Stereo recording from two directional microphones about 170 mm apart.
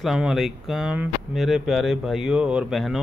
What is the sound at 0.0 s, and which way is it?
Speech, centre (ahead or behind).